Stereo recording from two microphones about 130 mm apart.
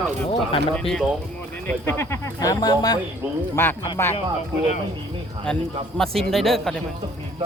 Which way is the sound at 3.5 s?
15° left (ahead or behind).